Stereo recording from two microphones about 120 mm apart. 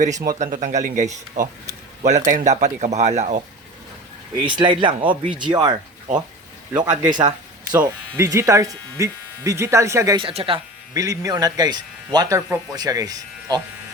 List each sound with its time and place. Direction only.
0.0 s speech: 90° right; by 3.4 s 70° right (ahead or behind)
4.4 s speech: 45° right (ahead or behind)
8.1 s speech: 25° right (ahead or behind)
10.2 s speech: 50° right (ahead or behind)
10.9 s speech: 30° right (ahead or behind)